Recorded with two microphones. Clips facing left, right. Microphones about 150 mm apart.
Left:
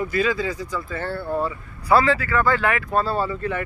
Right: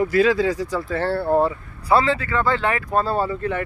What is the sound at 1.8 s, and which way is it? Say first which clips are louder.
Speech: even; 25° right (ahead or behind).